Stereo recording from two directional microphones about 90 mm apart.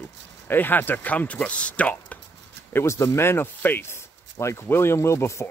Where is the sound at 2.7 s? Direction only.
30° left (ahead or behind).